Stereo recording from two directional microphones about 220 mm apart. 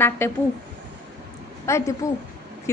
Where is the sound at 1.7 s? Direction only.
15° left (ahead or behind).